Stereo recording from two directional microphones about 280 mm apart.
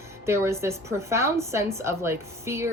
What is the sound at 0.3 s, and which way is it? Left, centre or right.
A woman's voice, centre.